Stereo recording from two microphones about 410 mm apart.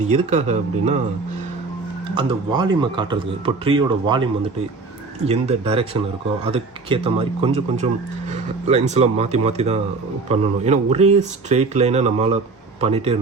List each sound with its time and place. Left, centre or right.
0.1 s speech: centre
2.1 s speech: centre